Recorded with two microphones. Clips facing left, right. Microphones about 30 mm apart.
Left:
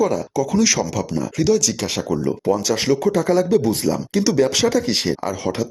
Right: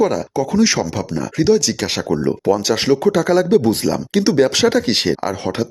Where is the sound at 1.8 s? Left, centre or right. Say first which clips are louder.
Right 3 dB; right.